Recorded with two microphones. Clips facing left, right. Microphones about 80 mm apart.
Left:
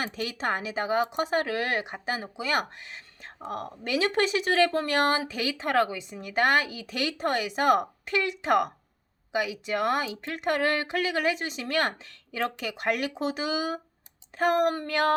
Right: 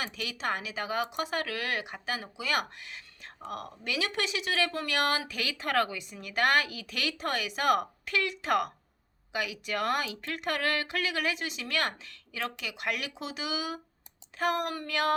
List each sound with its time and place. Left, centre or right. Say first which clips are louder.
0.0 s speech: left 4 dB; left